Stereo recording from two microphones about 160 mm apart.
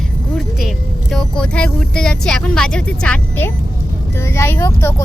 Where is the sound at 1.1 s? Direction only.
5° left (ahead or behind).